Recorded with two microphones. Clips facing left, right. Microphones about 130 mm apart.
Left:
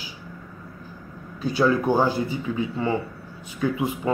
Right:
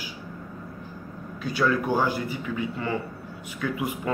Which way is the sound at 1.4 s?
30° left (ahead or behind).